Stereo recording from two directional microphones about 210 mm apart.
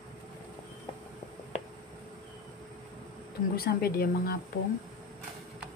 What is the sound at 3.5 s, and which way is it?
Speech, 45° left (ahead or behind).